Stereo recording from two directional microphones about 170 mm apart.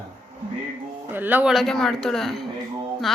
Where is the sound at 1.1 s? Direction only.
10° right (ahead or behind).